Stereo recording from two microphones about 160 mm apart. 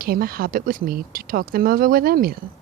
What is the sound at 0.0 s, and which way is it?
Speech, 70° right (ahead or behind).